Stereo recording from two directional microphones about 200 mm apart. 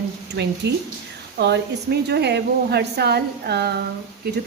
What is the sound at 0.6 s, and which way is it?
A woman's voice, 60° right (ahead or behind).